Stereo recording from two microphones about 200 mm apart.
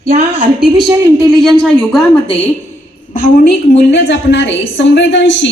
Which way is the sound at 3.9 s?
60° left (ahead or behind).